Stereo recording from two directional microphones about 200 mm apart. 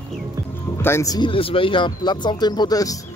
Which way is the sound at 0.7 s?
15° left (ahead or behind).